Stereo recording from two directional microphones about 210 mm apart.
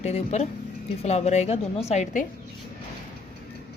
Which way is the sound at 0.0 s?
30° left (ahead or behind).